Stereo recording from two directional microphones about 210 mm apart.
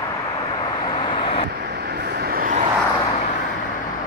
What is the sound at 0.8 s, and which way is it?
Vehicle, 20° left (ahead or behind).